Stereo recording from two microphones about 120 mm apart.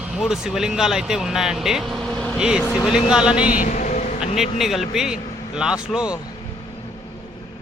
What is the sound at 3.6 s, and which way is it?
Vehicle, 90° left.